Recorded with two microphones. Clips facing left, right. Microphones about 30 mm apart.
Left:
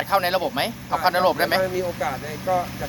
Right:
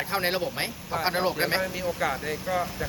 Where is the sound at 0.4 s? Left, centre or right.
Left.